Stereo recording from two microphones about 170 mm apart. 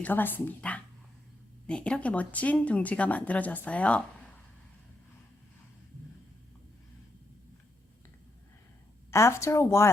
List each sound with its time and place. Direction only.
0.0 s speech: 10° left (ahead or behind)
9.0 s speech: 15° left (ahead or behind)